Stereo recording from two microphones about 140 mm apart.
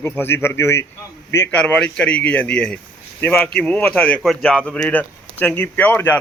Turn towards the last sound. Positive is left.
turn(degrees=15)  # may be behind; listen again after turning